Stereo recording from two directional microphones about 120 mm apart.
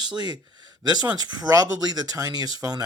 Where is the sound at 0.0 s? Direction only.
35° right (ahead or behind).